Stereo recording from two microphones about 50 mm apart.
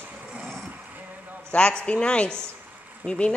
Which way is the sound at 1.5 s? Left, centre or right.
Left.